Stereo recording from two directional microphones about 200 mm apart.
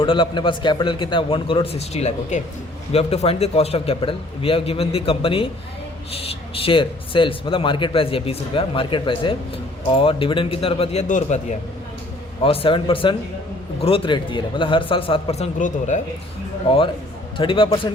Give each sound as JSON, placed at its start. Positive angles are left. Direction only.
{"t": 0.0, "sound": "speech", "side_deg": 25}
{"t": 12.4, "sound": "speech", "side_deg": 30}
{"t": 16.6, "sound": "speech", "side_deg": 25}